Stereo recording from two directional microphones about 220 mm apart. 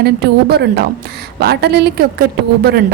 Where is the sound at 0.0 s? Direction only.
45° right (ahead or behind).